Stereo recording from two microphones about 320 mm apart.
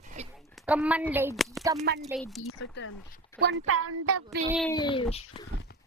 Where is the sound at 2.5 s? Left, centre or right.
Left.